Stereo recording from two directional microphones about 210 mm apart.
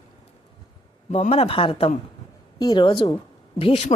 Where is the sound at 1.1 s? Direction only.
30° left (ahead or behind).